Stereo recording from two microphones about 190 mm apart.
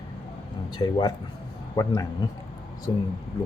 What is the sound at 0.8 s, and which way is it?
A man's voice, 25° left (ahead or behind).